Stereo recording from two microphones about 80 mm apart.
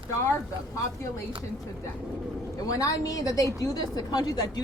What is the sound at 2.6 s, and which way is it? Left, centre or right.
A woman's voice, left.